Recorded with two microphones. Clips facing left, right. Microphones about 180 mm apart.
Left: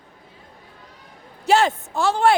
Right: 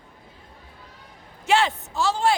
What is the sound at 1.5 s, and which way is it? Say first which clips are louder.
Speech: left 3 dB; 45° left (ahead or behind).